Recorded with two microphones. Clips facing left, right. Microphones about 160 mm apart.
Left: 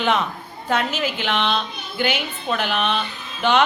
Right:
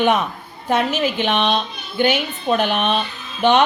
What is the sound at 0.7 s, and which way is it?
A woman's voice, 15° right (ahead or behind).